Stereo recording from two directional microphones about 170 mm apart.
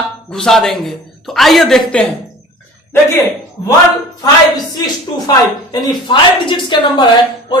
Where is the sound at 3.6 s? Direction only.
20° left (ahead or behind).